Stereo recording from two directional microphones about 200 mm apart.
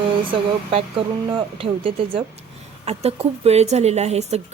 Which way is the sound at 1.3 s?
25° right (ahead or behind).